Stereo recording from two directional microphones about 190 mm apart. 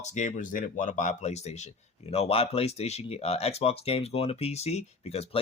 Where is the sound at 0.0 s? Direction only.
40° left (ahead or behind).